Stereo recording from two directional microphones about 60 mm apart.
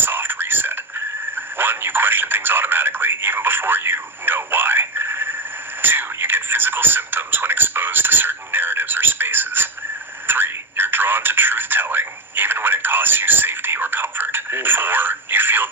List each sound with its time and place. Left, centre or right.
0.0 s whispering: right
1.5 s speech: right